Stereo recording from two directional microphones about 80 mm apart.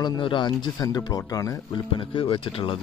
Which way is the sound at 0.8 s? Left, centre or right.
Left.